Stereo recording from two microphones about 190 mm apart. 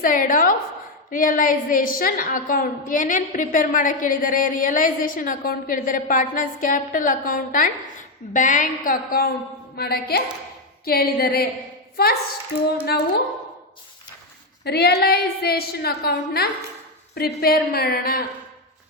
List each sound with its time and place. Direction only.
0.0 s a woman's voice: 45° left (ahead or behind)
14.6 s a woman's voice: 60° left (ahead or behind)